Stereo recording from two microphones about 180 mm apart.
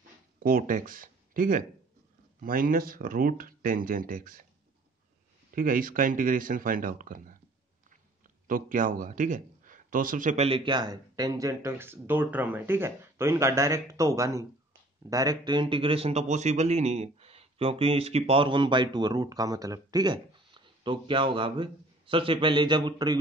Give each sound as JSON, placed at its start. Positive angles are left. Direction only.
{"t": 0.4, "sound": "speech", "side_deg": -55}
{"t": 5.5, "sound": "speech", "side_deg": -50}
{"t": 8.5, "sound": "speech", "side_deg": -50}